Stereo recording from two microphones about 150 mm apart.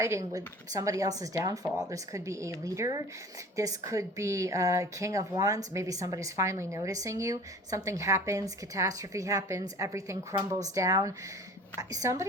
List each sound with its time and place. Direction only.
0.0 s speech: 20° right (ahead or behind)